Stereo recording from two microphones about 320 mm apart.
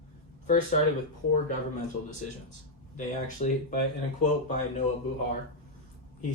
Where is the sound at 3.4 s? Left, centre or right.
Left.